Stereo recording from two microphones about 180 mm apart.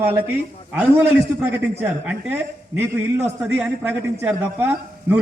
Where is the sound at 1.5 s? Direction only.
10° right (ahead or behind).